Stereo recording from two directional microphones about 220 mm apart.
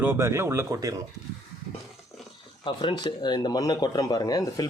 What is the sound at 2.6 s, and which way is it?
Speech, 20° left (ahead or behind).